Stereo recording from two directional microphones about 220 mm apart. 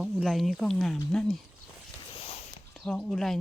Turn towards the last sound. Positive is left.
turn(degrees=0)  # may be behind; listen again after turning